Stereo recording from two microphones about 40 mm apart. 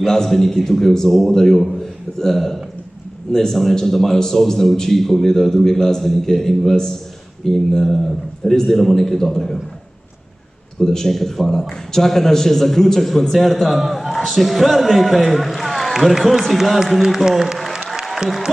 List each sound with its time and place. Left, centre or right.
0.0 s a man's voice: centre
10.8 s a man's voice: centre